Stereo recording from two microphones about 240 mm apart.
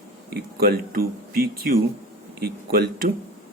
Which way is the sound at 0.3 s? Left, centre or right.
Right.